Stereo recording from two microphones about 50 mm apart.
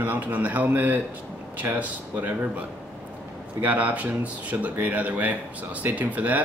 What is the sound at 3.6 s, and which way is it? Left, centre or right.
Speech, right.